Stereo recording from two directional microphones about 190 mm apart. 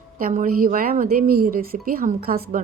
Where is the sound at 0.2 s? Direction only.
45° right (ahead or behind).